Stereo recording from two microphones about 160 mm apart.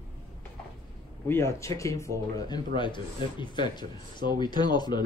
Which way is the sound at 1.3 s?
15° left (ahead or behind).